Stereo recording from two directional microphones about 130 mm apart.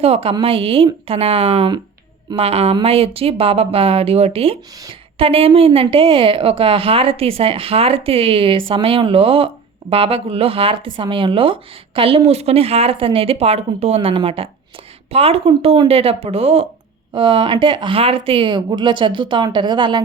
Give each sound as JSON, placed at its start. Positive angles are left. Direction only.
{"t": 0.0, "sound": "speech", "side_deg": -50}